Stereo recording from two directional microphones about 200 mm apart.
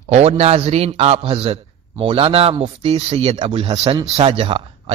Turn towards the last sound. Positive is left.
turn(degrees=-30)  # may be behind; listen again after turning